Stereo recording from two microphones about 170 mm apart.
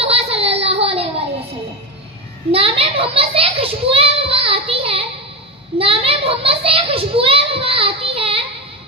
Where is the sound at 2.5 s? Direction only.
35° right (ahead or behind).